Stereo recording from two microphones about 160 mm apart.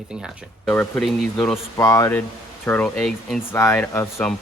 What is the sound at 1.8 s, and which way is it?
Speech, 20° left (ahead or behind).